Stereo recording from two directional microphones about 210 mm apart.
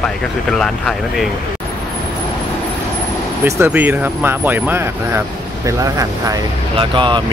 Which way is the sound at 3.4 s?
10° right (ahead or behind).